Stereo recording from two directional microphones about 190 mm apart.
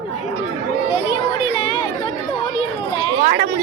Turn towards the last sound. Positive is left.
turn(degrees=-55)  # may be behind; listen again after turning